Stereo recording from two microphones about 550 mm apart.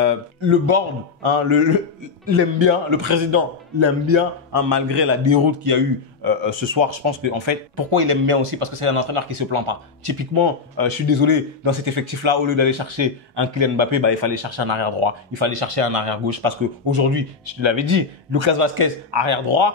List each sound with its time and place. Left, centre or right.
0.5 s a man's voice: right
17.5 s a man's voice: right